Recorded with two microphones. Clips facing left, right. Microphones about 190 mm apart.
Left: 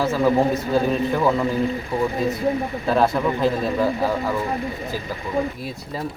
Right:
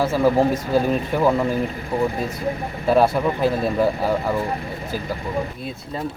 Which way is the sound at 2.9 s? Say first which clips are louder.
Right 2 dB; 10° right (ahead or behind).